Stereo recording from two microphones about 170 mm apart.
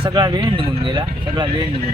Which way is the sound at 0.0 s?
25° right (ahead or behind).